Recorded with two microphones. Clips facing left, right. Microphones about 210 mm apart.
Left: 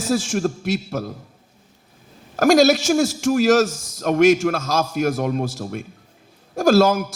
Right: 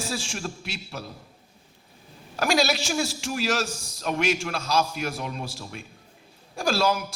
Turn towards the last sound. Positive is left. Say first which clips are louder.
# left 9 dB
turn(degrees=45)  # may be behind; listen again after turning